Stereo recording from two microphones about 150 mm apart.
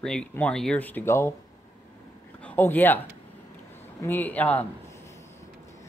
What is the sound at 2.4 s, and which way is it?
Speech, 15° left (ahead or behind).